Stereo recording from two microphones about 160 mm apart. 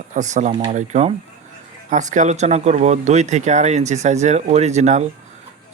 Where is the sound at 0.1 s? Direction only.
50° right (ahead or behind).